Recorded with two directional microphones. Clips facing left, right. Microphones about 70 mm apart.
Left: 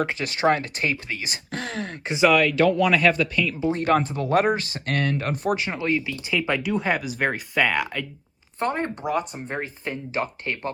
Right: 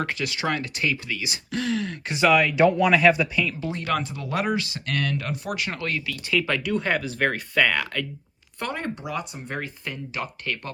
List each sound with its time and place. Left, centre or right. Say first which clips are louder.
0.2 s speech: left 5 dB; left
2.2 s speech: left 1 dB; centre
2.6 s speech: even; right
2.9 s speech: right 1 dB; centre
3.7 s speech: left 6 dB; left
5.5 s speech: left 4 dB; left
8.5 s speech: left 4 dB; left